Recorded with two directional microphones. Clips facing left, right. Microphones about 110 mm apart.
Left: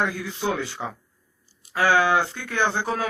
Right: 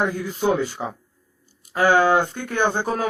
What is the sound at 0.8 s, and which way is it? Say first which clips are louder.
Speech: right 3 dB; 15° right (ahead or behind).